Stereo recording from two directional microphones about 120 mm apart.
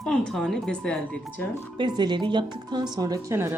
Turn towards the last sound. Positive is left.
turn(degrees=-20)  # may be behind; listen again after turning